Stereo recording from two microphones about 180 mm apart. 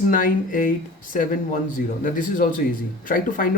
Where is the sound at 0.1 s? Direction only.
50° left (ahead or behind).